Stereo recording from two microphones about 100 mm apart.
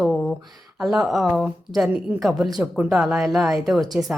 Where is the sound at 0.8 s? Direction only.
5° right (ahead or behind).